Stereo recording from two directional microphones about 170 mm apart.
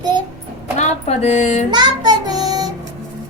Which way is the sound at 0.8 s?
40° left (ahead or behind).